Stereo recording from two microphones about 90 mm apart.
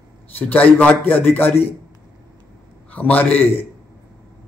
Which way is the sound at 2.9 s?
20° left (ahead or behind).